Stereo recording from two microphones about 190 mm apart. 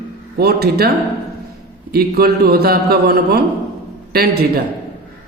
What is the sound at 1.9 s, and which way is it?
A man's voice, 55° right (ahead or behind).